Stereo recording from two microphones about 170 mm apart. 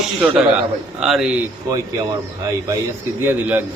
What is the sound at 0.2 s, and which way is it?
A man's voice, 5° right (ahead or behind).